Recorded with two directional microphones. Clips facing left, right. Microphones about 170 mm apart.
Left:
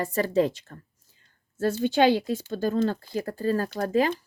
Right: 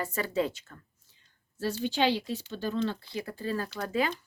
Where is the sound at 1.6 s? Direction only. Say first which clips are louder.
Left 7 dB; 50° left (ahead or behind).